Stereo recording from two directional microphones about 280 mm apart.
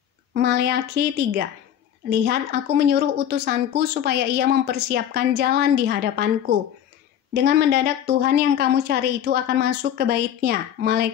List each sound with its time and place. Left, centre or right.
0.3 s a woman's voice: right
2.5 s a woman's voice: right